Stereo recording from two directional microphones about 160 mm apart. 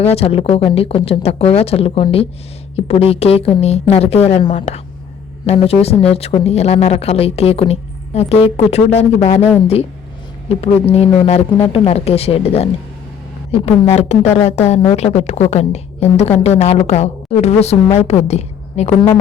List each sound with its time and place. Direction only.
0.0 s speech: 40° left (ahead or behind)
10.5 s a woman's voice: 40° left (ahead or behind)